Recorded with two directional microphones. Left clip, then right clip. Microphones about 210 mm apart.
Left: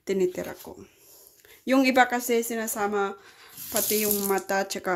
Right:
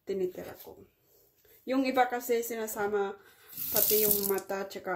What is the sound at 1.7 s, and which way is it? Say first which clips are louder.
Speech: left 7 dB; 50° left (ahead or behind).